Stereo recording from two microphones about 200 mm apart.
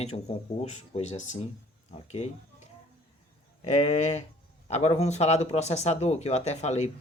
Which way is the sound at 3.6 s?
35° left (ahead or behind).